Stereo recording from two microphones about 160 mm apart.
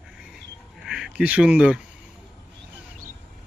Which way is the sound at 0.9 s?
5° right (ahead or behind).